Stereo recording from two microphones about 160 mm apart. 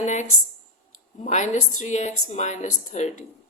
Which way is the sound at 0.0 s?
45° left (ahead or behind).